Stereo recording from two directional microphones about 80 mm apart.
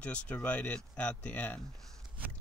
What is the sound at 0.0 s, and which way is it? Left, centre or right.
Speech, centre.